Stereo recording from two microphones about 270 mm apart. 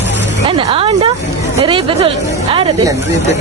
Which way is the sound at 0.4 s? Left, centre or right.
Centre.